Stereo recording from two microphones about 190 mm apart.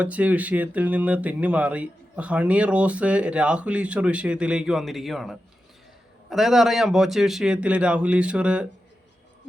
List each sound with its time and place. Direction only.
0.0 s a man's voice: 5° right (ahead or behind)